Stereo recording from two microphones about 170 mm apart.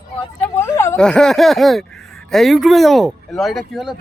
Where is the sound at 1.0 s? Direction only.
5° left (ahead or behind).